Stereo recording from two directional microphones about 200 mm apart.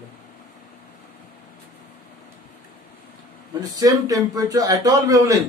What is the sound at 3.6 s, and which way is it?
A man's voice, 20° right (ahead or behind).